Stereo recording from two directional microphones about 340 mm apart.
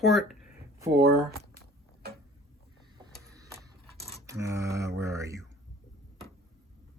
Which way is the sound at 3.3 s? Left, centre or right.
Centre.